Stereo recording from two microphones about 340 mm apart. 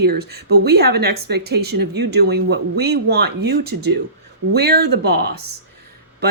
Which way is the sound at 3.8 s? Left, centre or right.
Right.